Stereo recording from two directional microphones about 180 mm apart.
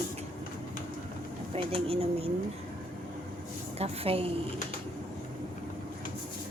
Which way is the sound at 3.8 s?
35° right (ahead or behind).